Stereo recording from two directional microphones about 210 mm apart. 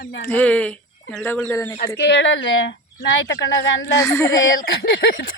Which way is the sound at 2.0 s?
55° left (ahead or behind).